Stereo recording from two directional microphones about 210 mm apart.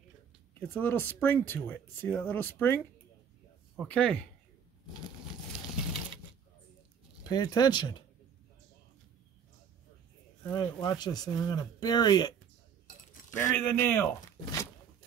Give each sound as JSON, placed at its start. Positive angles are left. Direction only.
{"t": 0.6, "sound": "speech", "side_deg": 10}
{"t": 7.2, "sound": "speech", "side_deg": 20}
{"t": 10.5, "sound": "speech", "side_deg": 20}
{"t": 13.4, "sound": "speech", "side_deg": 10}